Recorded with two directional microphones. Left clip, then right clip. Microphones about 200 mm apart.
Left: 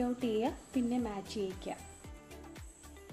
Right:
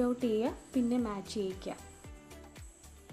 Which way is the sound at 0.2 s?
30° right (ahead or behind).